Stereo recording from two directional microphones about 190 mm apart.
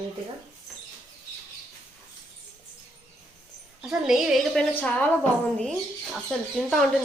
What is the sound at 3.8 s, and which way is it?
A woman's voice, 5° right (ahead or behind).